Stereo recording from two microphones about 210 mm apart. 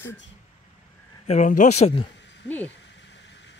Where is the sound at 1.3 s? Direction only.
35° left (ahead or behind).